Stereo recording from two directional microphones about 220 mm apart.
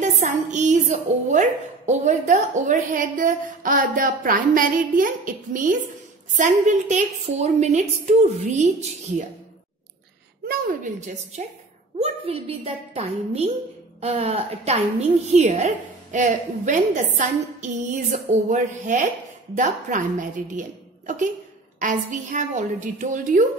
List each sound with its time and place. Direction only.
0.0 s a woman's voice: 35° right (ahead or behind)
10.5 s a woman's voice: 35° right (ahead or behind)
21.7 s a woman's voice: 35° right (ahead or behind)